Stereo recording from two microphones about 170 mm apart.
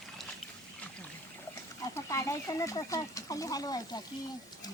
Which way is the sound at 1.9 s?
15° left (ahead or behind).